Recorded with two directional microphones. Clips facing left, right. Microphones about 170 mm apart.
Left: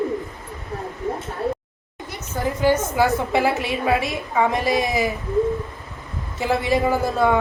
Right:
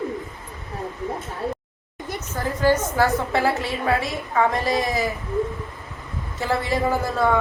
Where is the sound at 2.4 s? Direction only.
20° left (ahead or behind).